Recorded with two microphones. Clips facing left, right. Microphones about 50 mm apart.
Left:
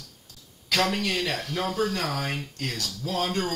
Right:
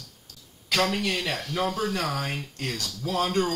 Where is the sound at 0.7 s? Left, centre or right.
Centre.